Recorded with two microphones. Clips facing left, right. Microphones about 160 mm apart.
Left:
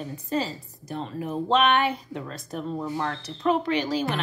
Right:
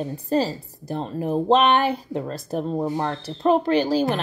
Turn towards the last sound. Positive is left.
turn(degrees=-35)  # may be behind; listen again after turning